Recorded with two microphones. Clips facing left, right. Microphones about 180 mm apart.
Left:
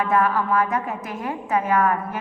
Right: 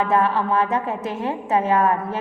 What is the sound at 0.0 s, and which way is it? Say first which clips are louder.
A woman's voice: right 1 dB; 25° right (ahead or behind).